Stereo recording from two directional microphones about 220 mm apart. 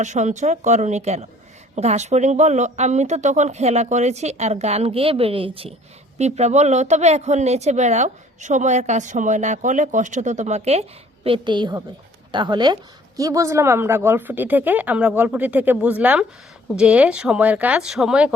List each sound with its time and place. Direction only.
0.0 s speech: 30° right (ahead or behind); by 18.3 s 5° right (ahead or behind)